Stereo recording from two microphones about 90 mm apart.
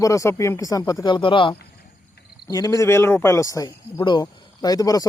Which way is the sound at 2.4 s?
40° left (ahead or behind).